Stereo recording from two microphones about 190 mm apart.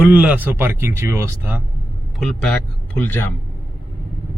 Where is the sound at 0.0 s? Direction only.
10° right (ahead or behind).